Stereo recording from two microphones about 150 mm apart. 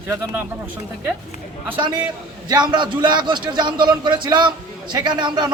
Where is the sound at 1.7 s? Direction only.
30° right (ahead or behind).